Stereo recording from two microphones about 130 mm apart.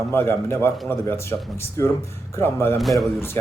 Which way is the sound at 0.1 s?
15° left (ahead or behind).